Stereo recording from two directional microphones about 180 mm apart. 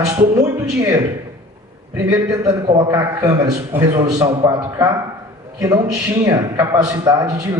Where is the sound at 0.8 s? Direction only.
15° right (ahead or behind).